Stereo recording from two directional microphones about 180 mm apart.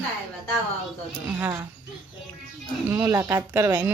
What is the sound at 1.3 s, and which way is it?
Speech, 10° right (ahead or behind).